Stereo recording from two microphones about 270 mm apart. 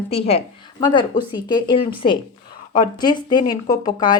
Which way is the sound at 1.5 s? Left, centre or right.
Centre.